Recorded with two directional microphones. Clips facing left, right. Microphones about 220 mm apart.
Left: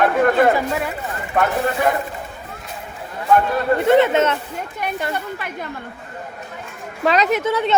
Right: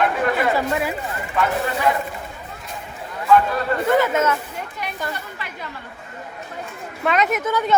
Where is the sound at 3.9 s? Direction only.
25° left (ahead or behind).